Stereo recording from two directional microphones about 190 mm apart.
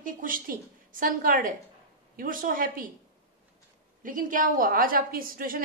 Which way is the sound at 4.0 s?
45° right (ahead or behind).